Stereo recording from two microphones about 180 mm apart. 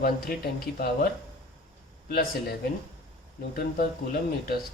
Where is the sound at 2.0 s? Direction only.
60° left (ahead or behind).